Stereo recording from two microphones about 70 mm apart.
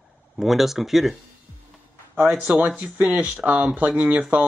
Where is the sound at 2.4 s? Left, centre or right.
Right.